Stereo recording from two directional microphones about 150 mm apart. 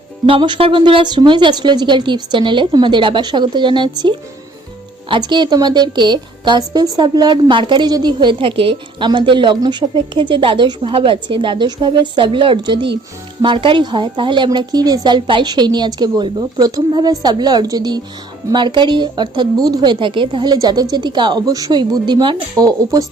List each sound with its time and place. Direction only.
0.3 s a woman's voice: 35° right (ahead or behind)